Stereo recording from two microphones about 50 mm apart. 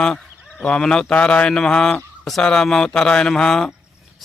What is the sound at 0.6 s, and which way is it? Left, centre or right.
A man's voice, centre.